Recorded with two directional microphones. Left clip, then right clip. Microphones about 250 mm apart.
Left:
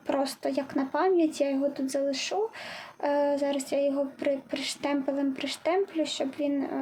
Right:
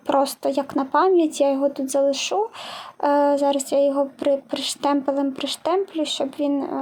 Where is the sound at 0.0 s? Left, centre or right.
Right.